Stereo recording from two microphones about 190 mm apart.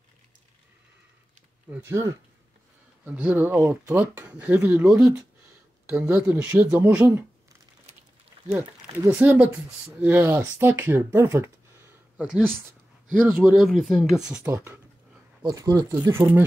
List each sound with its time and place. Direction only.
1.7 s speech: 10° right (ahead or behind)
8.5 s speech: 10° right (ahead or behind)